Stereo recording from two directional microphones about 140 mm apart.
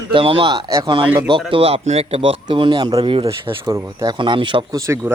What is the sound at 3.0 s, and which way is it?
Speech, 40° right (ahead or behind).